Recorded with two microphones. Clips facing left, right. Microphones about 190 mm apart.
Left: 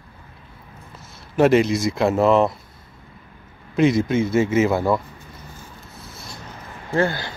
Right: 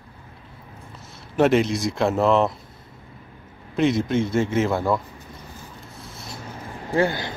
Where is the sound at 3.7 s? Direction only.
Centre (ahead or behind).